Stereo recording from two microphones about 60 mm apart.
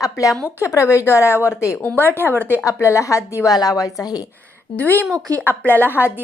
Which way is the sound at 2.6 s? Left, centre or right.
Left.